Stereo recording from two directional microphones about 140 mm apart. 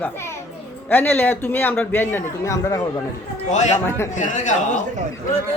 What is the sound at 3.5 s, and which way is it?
A man's voice, 55° left (ahead or behind).